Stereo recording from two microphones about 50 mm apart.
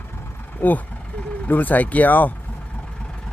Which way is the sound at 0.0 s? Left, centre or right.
Left.